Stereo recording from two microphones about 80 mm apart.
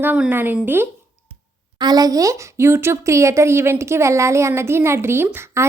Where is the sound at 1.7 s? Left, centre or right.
Right.